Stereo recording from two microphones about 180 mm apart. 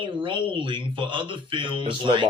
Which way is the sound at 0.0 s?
30° right (ahead or behind).